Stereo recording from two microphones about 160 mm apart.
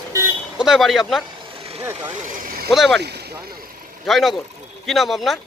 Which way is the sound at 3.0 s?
90° right.